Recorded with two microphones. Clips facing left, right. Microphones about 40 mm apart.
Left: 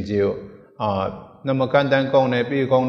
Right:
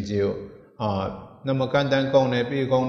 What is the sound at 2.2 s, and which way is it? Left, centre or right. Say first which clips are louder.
Speech: left 4 dB; centre.